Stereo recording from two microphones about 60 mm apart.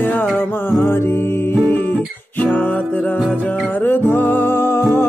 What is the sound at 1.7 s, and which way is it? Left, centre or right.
Music, left.